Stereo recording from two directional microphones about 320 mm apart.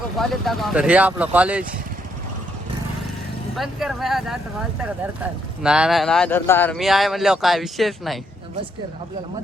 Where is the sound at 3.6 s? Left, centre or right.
Centre.